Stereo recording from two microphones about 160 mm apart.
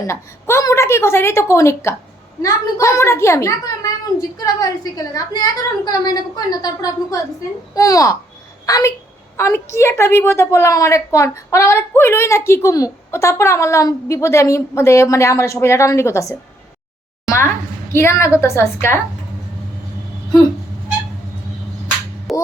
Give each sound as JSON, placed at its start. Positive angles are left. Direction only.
{"t": 0.1, "sound": "a woman's voice", "side_deg": 15}
{"t": 22.3, "sound": "music", "side_deg": 0}